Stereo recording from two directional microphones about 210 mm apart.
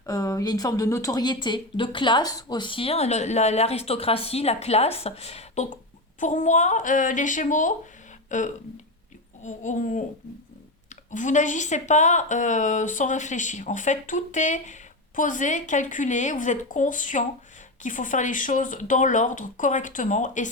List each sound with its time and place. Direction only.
0.0 s a woman's voice: 15° left (ahead or behind); by 10.0 s 35° left (ahead or behind)
11.1 s a woman's voice: 35° left (ahead or behind)